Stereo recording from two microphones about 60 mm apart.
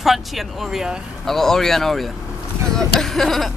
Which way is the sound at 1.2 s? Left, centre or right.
Centre.